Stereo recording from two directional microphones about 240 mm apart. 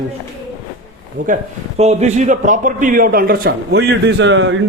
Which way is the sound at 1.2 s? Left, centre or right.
Right.